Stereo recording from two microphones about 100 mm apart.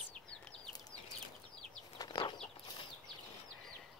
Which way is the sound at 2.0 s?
45° left (ahead or behind).